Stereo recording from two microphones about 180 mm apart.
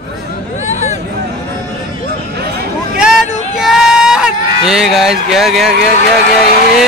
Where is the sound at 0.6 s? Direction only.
40° left (ahead or behind).